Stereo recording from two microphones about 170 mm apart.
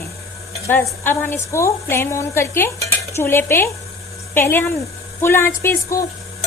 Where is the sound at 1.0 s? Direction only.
10° left (ahead or behind).